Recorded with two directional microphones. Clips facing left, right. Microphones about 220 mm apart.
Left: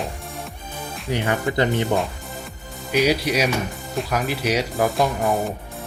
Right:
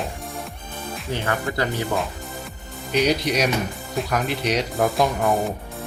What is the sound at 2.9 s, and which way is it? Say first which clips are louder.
Speech: left 1 dB; 5° left (ahead or behind).